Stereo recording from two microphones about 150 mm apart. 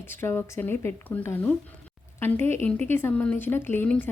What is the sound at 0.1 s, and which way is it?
Speech, 15° left (ahead or behind).